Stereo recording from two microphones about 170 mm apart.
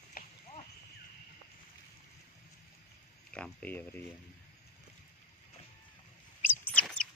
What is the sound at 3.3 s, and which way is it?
Speech, 10° left (ahead or behind).